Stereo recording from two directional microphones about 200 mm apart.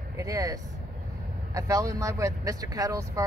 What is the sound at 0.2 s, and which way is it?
Speech, 15° right (ahead or behind).